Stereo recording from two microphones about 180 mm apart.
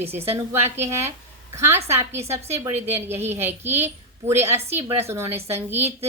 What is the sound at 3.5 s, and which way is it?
Speech, 35° right (ahead or behind).